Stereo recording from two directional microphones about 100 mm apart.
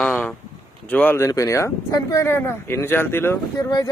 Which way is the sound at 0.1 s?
15° left (ahead or behind).